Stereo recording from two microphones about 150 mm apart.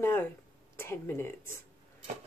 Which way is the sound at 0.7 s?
15° left (ahead or behind).